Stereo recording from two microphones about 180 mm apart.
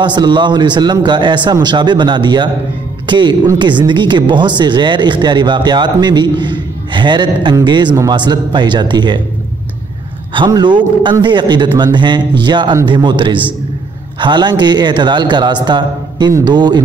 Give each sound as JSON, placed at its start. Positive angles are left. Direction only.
{"t": 0.0, "sound": "speech", "side_deg": -25}
{"t": 10.3, "sound": "speech", "side_deg": -25}